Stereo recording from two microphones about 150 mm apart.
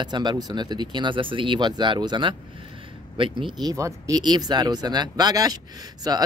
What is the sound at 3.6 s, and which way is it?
Speech, 25° right (ahead or behind).